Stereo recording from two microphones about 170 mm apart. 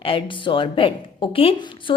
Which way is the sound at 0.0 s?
30° left (ahead or behind).